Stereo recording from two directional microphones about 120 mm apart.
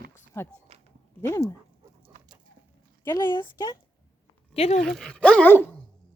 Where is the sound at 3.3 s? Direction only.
35° left (ahead or behind).